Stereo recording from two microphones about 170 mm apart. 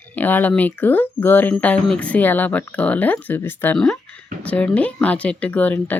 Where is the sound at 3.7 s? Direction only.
5° left (ahead or behind).